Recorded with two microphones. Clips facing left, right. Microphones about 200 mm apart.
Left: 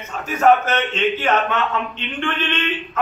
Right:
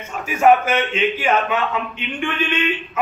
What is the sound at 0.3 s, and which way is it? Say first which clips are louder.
A man's voice: right 1 dB; 10° right (ahead or behind).